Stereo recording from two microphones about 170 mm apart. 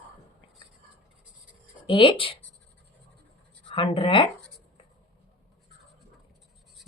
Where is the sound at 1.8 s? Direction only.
30° left (ahead or behind).